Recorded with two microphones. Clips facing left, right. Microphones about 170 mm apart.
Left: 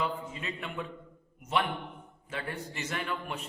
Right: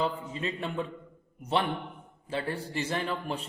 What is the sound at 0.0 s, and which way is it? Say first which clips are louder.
A man's voice: right 3 dB; 30° right (ahead or behind).